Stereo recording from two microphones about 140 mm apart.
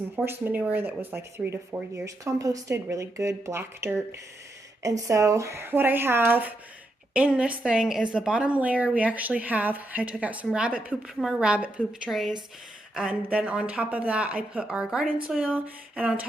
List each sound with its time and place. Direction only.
0.3 s a woman's voice: 15° right (ahead or behind)